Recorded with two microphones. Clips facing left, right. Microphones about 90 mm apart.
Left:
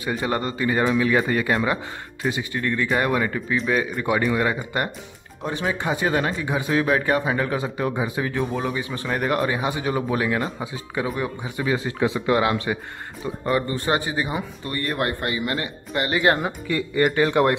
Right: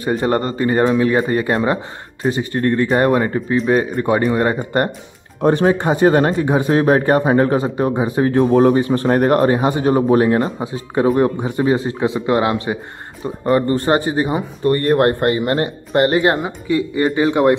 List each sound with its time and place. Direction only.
0.0 s speech: 40° right (ahead or behind)
16.4 s speech: 15° right (ahead or behind)